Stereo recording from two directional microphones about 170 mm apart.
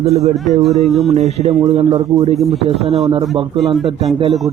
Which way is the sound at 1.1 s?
40° right (ahead or behind).